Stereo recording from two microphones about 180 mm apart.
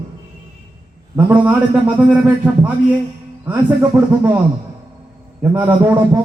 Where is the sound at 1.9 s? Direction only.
10° right (ahead or behind).